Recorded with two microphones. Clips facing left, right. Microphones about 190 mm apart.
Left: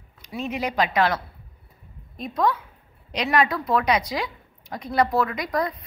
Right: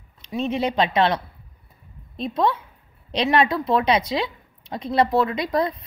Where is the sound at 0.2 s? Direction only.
25° right (ahead or behind).